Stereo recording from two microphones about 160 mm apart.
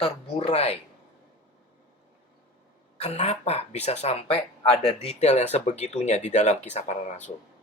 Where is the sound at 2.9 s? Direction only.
40° left (ahead or behind).